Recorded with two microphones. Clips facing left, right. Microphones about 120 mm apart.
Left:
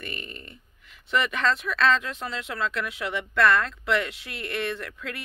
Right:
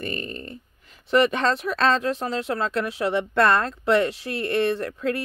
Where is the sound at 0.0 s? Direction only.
35° right (ahead or behind).